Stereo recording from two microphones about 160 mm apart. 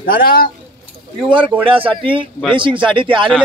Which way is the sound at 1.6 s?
35° right (ahead or behind).